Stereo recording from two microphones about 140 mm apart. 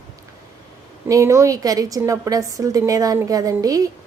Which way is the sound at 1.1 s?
20° right (ahead or behind).